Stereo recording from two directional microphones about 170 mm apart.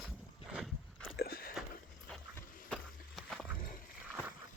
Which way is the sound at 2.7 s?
Centre (ahead or behind).